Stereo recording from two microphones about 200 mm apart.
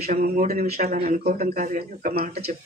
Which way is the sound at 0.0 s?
35° right (ahead or behind).